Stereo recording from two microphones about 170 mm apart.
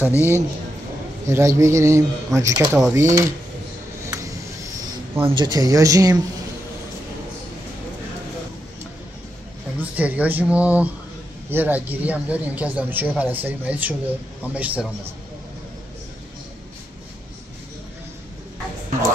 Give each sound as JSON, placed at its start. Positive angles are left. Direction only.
{"t": 0.1, "sound": "a man's voice", "side_deg": 15}
{"t": 1.2, "sound": "speech", "side_deg": -15}
{"t": 5.2, "sound": "speech", "side_deg": -25}
{"t": 9.8, "sound": "speech", "side_deg": -10}